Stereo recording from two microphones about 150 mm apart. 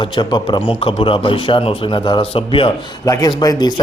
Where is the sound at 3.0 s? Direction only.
25° left (ahead or behind).